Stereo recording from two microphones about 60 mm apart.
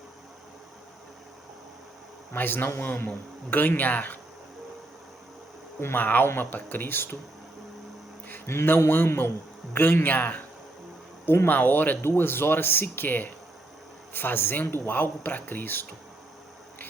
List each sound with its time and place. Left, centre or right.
2.3 s a man's voice: left
5.8 s a man's voice: left
8.4 s a man's voice: left
11.4 s a man's voice: left